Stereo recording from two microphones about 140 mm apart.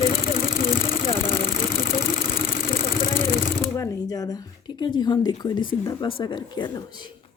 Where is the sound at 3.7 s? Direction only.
25° left (ahead or behind).